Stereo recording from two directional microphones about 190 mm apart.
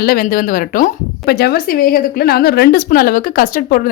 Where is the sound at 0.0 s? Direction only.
50° left (ahead or behind).